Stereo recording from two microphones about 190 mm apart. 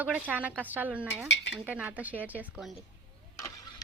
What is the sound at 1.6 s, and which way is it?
Speech, 10° right (ahead or behind).